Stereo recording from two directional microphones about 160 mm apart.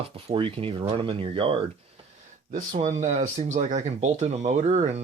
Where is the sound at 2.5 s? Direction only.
55° right (ahead or behind).